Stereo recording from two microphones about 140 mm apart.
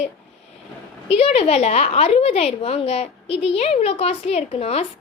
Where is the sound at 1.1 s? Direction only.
45° left (ahead or behind).